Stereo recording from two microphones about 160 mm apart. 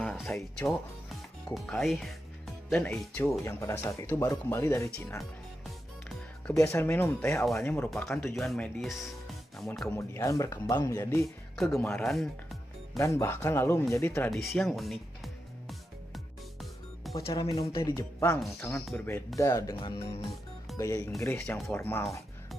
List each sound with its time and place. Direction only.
0.2 s speech: centre (ahead or behind)
2.9 s speech: 15° left (ahead or behind)
6.5 s speech: 20° left (ahead or behind)
7.9 s speech: centre (ahead or behind)
9.8 s speech: 20° left (ahead or behind)
11.5 s speech: centre (ahead or behind)
12.9 s speech: 20° left (ahead or behind)
14.3 s music: centre (ahead or behind)
17.3 s speech: 20° left (ahead or behind)
18.4 s speech: centre (ahead or behind); by 20.2 s 35° left (ahead or behind)
20.7 s speech: 20° left (ahead or behind)
21.4 s speech: 5° left (ahead or behind)
21.7 s speech: 15° left (ahead or behind)